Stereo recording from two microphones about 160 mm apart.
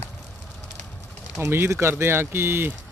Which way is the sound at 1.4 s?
15° right (ahead or behind).